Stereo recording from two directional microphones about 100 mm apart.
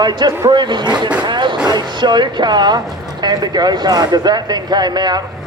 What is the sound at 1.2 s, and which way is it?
Vehicle, 50° right (ahead or behind).